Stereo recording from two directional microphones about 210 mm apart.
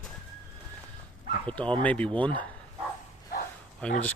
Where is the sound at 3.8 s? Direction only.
5° left (ahead or behind).